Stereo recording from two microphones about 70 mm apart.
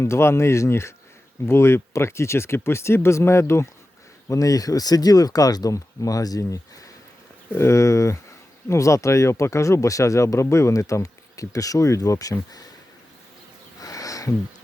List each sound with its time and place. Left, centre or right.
0.0 s speech: left
4.3 s speech: left
5.7 s speech: left
7.5 s speech: left
13.7 s a sound: left